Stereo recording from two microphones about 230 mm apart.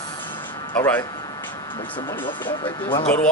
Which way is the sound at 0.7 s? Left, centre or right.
Centre.